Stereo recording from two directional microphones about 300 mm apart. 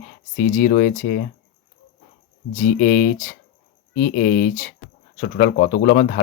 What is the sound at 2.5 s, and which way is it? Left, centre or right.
Speech, left.